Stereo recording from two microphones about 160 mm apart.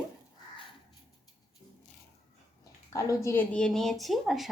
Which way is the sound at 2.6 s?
20° left (ahead or behind).